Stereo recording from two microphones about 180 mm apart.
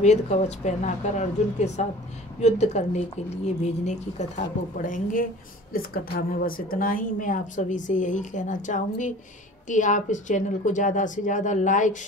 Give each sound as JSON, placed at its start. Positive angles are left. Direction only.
{"t": 0.0, "sound": "a woman's voice", "side_deg": 40}